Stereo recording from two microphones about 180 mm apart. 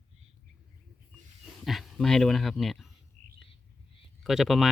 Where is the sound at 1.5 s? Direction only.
Centre (ahead or behind).